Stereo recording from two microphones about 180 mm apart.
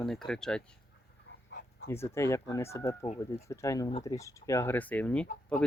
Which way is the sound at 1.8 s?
15° left (ahead or behind).